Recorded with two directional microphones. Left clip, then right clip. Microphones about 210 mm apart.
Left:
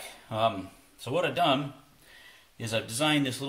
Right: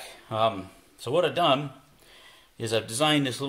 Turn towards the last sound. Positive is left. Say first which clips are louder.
# right 3 dB
turn(degrees=-40)  # may be behind; listen again after turning